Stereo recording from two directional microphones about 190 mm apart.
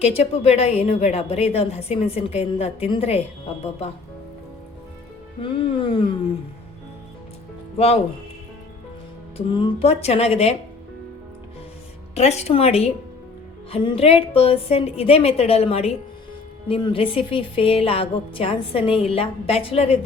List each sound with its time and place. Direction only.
0.0 s a woman's voice: 30° left (ahead or behind)
5.4 s a woman's voice: 25° left (ahead or behind)
9.5 s a woman's voice: 25° left (ahead or behind)
12.1 s a woman's voice: 35° left (ahead or behind)